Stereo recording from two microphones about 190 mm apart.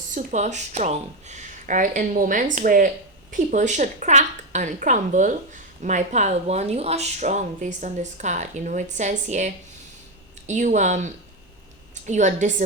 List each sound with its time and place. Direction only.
0.1 s speech: 40° right (ahead or behind)